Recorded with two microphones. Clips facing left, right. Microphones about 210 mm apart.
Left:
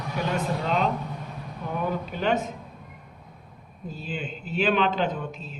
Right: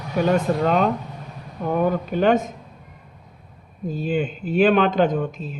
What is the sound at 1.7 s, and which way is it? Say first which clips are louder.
Speech: right 8 dB; 50° right (ahead or behind).